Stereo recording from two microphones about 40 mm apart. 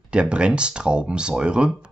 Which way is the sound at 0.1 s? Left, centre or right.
Right.